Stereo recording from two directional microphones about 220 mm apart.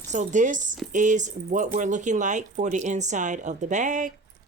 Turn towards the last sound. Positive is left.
turn(degrees=-35)  # may be behind; listen again after turning